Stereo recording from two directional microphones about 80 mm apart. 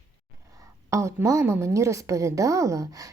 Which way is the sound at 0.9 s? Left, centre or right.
Right.